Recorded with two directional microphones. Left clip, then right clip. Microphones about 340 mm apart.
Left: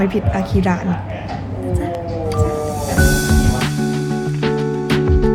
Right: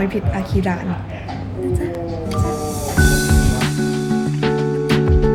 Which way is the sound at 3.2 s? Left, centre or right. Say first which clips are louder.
Left 1 dB; centre.